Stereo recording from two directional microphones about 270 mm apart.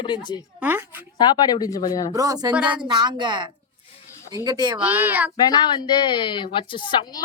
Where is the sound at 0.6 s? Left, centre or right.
Centre.